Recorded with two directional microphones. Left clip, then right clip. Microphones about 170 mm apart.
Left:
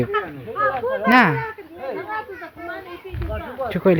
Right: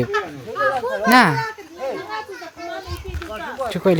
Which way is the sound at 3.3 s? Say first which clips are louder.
Right 1 dB; 60° right (ahead or behind).